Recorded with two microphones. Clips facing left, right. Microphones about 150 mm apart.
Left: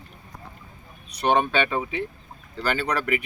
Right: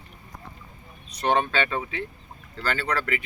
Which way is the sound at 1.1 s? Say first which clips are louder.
Left 2 dB; 10° left (ahead or behind).